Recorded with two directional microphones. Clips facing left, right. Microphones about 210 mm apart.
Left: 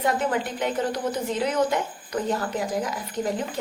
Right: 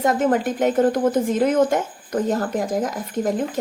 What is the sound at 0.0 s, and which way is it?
A woman's voice, 45° right (ahead or behind).